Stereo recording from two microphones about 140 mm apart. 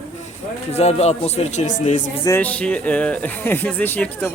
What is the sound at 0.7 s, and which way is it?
Speech, 50° left (ahead or behind).